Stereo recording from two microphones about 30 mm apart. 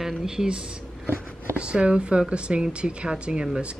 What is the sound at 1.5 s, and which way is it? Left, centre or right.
Speech, right.